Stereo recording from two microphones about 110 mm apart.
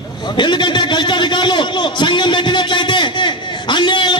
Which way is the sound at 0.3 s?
45° left (ahead or behind).